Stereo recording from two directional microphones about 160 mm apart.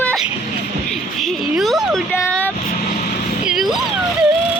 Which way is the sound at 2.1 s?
10° left (ahead or behind).